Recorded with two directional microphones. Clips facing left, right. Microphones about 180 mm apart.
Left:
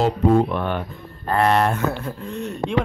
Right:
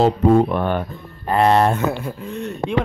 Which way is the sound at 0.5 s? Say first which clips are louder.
Right 4 dB; 45° right (ahead or behind).